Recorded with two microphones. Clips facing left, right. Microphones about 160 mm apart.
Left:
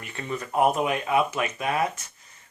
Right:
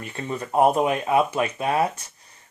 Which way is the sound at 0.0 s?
30° right (ahead or behind).